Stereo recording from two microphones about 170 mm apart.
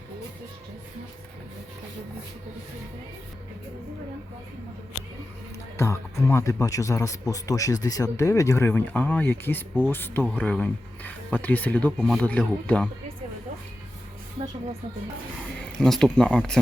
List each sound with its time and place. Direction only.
5.7 s a man's voice: 15° left (ahead or behind)
14.4 s speech: 40° right (ahead or behind)
15.8 s a man's voice: 5° left (ahead or behind)